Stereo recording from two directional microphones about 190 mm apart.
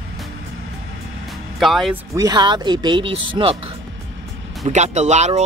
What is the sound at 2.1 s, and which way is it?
Speech, 20° right (ahead or behind).